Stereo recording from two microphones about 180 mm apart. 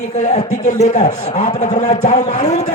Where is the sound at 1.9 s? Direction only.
40° left (ahead or behind).